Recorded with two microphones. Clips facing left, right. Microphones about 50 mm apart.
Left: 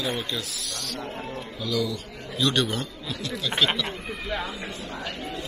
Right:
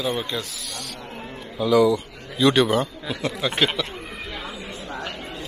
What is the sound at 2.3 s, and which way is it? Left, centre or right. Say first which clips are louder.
Speech: right 7 dB; centre.